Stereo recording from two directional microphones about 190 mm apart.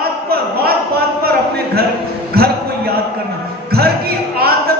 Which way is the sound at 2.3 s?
55° right (ahead or behind).